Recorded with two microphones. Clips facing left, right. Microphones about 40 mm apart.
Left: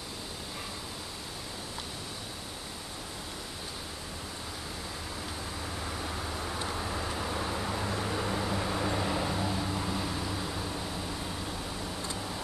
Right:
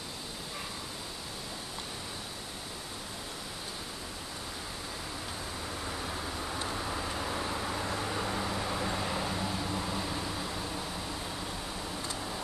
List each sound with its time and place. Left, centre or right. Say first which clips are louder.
5.6 s vehicle: left 1 dB; centre